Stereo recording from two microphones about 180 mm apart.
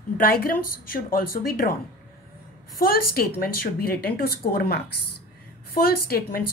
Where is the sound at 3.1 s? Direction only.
55° left (ahead or behind).